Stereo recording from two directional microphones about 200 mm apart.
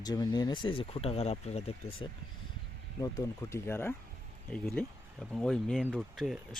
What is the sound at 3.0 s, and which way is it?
Speech, 15° left (ahead or behind).